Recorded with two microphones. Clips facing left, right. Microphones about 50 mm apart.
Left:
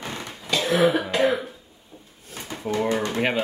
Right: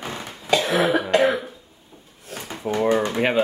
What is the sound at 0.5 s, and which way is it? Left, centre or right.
Cough, right.